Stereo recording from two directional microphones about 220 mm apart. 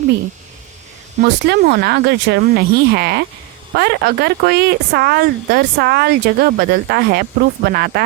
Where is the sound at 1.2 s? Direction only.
50° right (ahead or behind).